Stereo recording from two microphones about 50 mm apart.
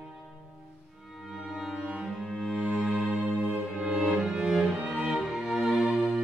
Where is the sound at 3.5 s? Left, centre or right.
Centre.